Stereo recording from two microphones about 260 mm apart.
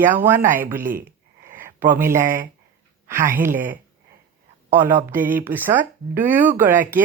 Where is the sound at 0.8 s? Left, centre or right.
Right.